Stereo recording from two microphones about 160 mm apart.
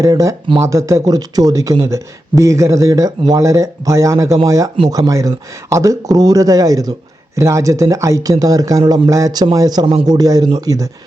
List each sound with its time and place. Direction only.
0.0 s speech: 20° right (ahead or behind)